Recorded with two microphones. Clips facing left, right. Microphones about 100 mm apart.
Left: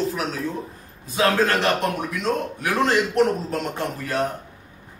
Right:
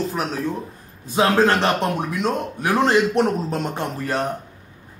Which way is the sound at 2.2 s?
30° right (ahead or behind).